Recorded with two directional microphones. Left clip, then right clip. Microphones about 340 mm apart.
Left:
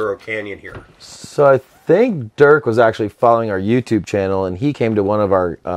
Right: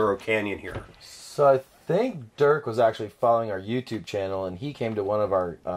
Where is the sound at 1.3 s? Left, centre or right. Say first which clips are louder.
Left 8 dB; left.